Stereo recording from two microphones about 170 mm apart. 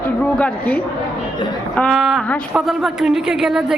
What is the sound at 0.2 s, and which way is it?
A woman's voice, 10° left (ahead or behind).